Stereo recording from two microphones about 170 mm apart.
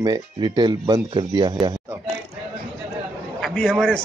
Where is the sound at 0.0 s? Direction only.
25° right (ahead or behind).